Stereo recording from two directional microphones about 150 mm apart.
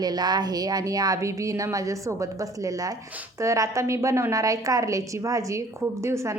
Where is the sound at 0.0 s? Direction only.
25° right (ahead or behind).